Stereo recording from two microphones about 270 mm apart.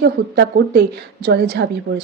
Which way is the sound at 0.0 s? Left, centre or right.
Right.